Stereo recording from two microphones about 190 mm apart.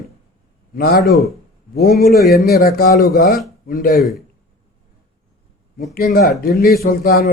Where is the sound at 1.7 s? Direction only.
50° left (ahead or behind).